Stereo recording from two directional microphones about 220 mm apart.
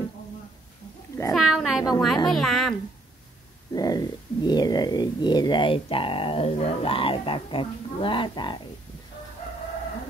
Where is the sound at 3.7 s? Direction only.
15° left (ahead or behind).